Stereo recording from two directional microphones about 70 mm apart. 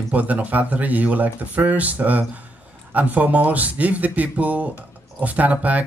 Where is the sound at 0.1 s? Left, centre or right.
Right.